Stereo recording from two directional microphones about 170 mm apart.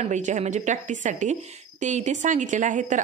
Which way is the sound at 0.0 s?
45° right (ahead or behind).